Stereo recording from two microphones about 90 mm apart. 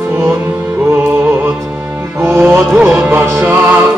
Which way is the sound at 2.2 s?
25° right (ahead or behind).